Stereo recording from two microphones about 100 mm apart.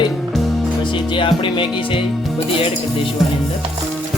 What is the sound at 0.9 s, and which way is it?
Music, 55° left (ahead or behind).